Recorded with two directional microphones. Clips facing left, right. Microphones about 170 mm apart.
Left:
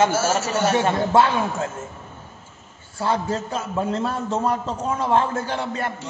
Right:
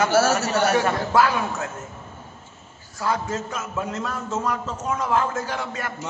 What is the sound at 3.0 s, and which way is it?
Speech, 30° left (ahead or behind).